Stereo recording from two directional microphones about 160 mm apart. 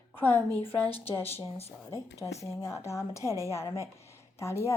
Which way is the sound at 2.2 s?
20° left (ahead or behind).